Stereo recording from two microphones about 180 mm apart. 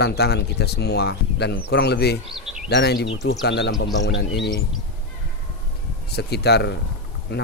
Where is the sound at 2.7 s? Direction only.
65° left (ahead or behind).